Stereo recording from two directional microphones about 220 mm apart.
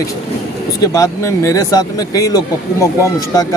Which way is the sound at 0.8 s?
15° left (ahead or behind).